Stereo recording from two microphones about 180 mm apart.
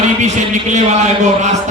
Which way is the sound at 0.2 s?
40° right (ahead or behind).